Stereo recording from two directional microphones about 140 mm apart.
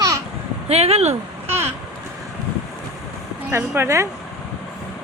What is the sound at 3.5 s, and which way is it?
Speech, 15° right (ahead or behind).